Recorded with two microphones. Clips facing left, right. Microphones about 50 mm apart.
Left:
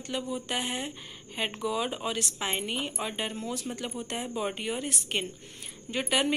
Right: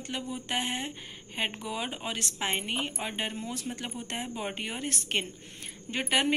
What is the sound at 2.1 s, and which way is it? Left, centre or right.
A woman's voice, right.